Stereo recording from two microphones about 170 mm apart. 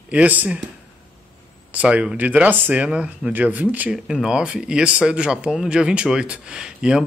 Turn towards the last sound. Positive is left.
turn(degrees=-5)  # may be behind; listen again after turning